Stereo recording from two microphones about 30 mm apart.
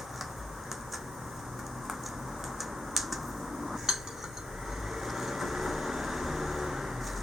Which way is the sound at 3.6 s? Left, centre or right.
Centre.